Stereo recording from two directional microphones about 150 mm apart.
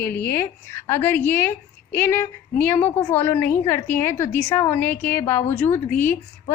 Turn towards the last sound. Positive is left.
turn(degrees=15)  # may be behind; listen again after turning